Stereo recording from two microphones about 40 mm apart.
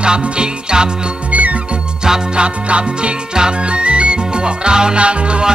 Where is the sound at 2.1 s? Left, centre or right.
Right.